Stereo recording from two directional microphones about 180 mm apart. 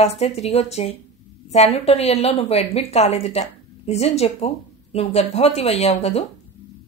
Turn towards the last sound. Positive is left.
turn(degrees=35)  # may be behind; listen again after turning